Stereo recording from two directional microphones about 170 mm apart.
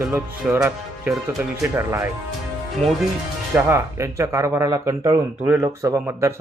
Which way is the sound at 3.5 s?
15° right (ahead or behind).